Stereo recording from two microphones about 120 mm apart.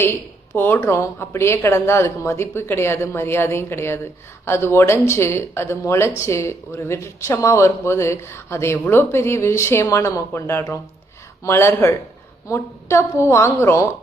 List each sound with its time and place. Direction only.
0.0 s a woman's voice: 20° left (ahead or behind)